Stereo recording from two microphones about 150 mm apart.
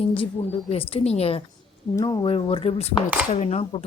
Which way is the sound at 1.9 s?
25° left (ahead or behind).